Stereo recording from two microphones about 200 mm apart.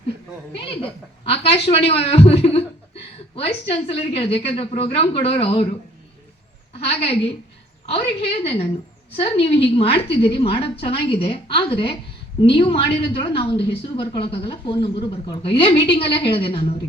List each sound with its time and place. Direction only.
0.7 s a woman's voice: 30° left (ahead or behind)
6.7 s a woman's voice: 30° left (ahead or behind)
8.4 s a woman's voice: 30° left (ahead or behind)